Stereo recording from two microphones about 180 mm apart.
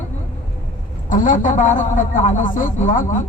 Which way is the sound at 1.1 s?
45° left (ahead or behind).